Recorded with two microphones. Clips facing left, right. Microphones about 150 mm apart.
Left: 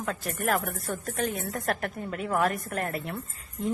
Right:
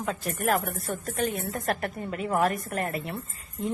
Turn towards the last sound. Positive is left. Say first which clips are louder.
# left 1 dB
turn(degrees=0)  # may be behind; listen again after turning